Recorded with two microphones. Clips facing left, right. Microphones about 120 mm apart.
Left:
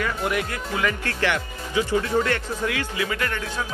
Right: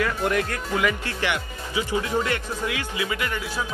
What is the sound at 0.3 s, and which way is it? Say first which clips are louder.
Speech: right 2 dB; 10° left (ahead or behind).